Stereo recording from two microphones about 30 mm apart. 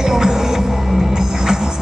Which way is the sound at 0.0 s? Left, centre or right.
Centre.